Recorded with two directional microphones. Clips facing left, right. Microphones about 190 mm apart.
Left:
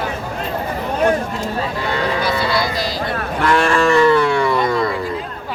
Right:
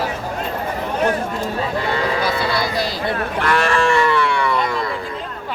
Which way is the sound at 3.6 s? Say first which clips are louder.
Left 5 dB; 40° left (ahead or behind).